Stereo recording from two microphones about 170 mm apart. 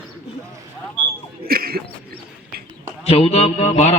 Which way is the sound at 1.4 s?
60° right (ahead or behind).